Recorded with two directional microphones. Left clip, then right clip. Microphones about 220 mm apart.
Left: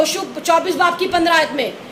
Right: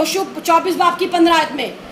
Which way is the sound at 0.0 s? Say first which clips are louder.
Even; 15° left (ahead or behind).